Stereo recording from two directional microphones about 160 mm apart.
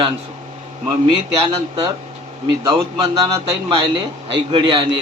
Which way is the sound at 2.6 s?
20° right (ahead or behind).